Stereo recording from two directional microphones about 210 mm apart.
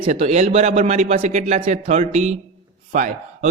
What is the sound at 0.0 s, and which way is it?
A man's voice, 30° right (ahead or behind).